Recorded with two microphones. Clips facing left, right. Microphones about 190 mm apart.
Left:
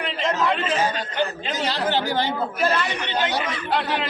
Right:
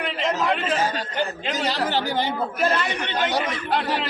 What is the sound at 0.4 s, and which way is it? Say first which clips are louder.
Speech: left 1 dB; centre (ahead or behind).